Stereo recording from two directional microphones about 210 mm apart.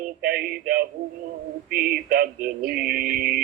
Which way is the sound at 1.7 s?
45° right (ahead or behind).